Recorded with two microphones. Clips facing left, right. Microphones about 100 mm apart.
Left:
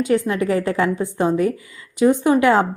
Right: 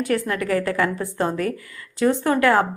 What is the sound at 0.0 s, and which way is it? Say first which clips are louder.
A woman's voice: left 4 dB; 20° left (ahead or behind).